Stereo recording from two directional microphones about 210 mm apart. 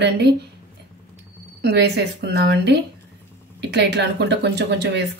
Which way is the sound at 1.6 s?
50° right (ahead or behind).